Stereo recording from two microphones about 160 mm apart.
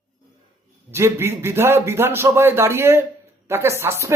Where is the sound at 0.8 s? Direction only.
15° right (ahead or behind).